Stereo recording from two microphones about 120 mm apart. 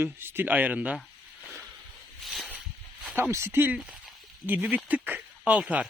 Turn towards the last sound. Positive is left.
turn(degrees=-10)  # may be behind; listen again after turning